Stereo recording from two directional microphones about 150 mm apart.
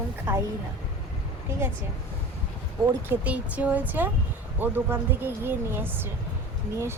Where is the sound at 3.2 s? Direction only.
10° right (ahead or behind).